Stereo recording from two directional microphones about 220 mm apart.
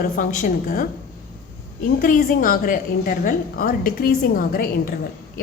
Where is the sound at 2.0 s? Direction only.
40° left (ahead or behind).